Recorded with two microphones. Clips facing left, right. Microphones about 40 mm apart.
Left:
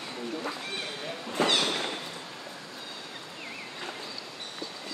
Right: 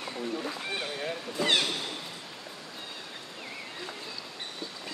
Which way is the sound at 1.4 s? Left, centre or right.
Left.